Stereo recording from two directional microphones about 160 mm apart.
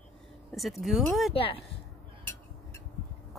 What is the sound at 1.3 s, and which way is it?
Speech, 35° left (ahead or behind).